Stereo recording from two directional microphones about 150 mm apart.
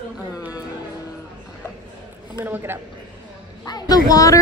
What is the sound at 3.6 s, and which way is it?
Speech, 25° left (ahead or behind).